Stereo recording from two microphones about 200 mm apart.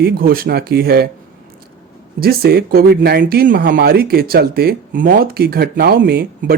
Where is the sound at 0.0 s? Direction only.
45° right (ahead or behind).